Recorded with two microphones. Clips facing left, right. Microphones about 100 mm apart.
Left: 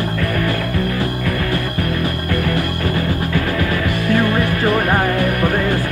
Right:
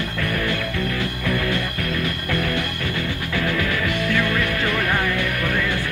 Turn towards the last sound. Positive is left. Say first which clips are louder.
# left 6 dB
turn(degrees=40)  # may be behind; listen again after turning